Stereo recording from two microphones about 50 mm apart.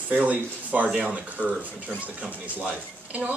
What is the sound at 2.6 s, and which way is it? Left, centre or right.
Speech, right.